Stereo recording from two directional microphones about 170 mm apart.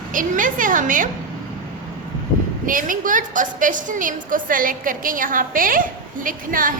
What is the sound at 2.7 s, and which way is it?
A woman's voice, 50° right (ahead or behind).